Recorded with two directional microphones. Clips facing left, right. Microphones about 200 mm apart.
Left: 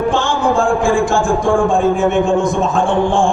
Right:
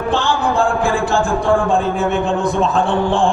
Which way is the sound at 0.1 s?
35° right (ahead or behind).